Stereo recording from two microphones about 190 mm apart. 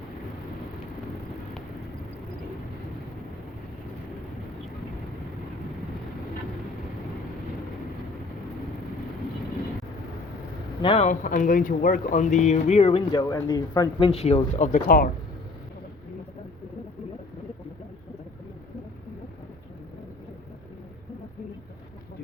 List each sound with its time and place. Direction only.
10.8 s speech: 35° left (ahead or behind)
14.1 s speech: 35° left (ahead or behind); by 15.1 s 50° left (ahead or behind)